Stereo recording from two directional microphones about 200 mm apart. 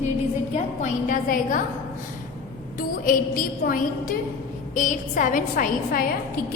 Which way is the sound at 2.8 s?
45° left (ahead or behind).